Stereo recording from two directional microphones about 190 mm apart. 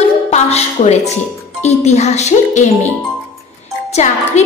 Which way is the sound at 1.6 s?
35° left (ahead or behind).